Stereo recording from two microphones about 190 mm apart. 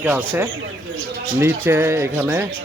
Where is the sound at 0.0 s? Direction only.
10° right (ahead or behind).